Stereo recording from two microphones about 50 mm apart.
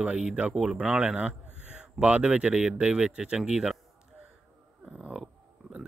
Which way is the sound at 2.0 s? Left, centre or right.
Right.